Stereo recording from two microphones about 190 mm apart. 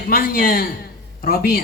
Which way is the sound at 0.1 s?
50° left (ahead or behind).